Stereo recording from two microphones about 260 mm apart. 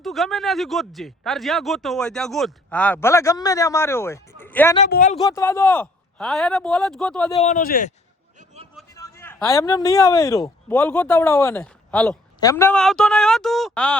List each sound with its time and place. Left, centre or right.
0.0 s speech: centre
4.9 s speech: left
5.2 s speech: centre
7.3 s speech: left
9.0 s speech: centre